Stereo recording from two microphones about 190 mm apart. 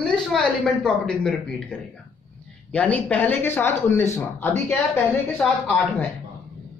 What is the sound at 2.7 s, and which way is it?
Speech, 5° left (ahead or behind).